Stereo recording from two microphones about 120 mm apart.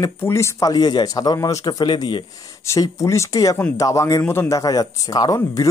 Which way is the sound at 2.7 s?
25° left (ahead or behind).